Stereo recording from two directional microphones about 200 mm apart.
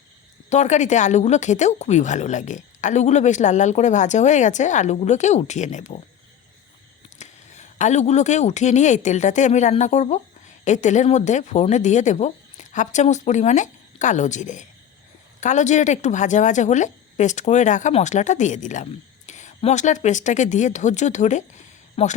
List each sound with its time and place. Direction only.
0.5 s speech: 35° left (ahead or behind)
7.2 s speech: 35° left (ahead or behind)